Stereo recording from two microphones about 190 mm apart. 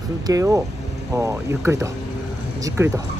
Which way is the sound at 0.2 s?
20° right (ahead or behind).